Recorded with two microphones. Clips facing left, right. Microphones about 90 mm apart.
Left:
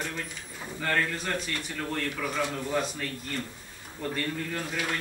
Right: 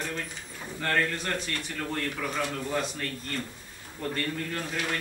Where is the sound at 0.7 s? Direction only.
Centre (ahead or behind).